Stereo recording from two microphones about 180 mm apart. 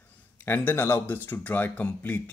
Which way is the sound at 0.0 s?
10° left (ahead or behind).